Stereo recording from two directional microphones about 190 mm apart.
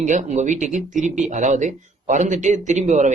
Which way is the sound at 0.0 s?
40° right (ahead or behind).